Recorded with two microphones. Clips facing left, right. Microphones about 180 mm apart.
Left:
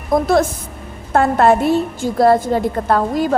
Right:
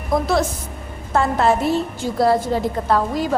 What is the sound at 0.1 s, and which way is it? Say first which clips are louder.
A woman's voice: left 4 dB; 50° left (ahead or behind).